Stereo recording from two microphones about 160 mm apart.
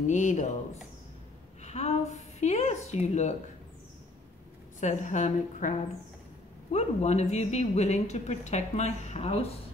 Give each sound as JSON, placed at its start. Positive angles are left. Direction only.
{"t": 0.0, "sound": "a woman's voice", "side_deg": 50}
{"t": 1.6, "sound": "a woman's voice", "side_deg": 45}
{"t": 4.7, "sound": "a woman's voice", "side_deg": 50}